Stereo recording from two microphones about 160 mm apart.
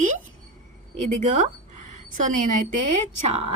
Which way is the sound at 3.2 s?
40° right (ahead or behind).